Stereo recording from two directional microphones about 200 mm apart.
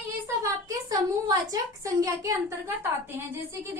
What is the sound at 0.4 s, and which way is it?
A woman's voice, 15° right (ahead or behind).